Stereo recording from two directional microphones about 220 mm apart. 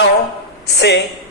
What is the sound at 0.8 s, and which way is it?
Speech, 50° left (ahead or behind).